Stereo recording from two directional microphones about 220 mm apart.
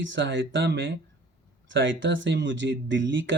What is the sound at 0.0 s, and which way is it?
Speech, 55° right (ahead or behind).